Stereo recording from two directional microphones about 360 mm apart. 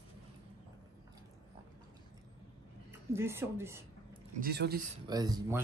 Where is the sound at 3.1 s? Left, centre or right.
Centre.